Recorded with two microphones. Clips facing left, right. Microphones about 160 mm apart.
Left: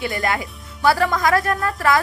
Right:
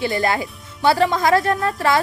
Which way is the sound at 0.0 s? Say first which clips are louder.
Right 3 dB; 25° right (ahead or behind).